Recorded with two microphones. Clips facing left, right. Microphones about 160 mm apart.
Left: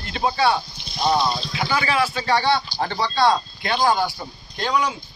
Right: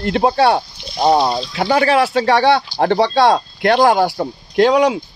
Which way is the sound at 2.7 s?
65° right (ahead or behind).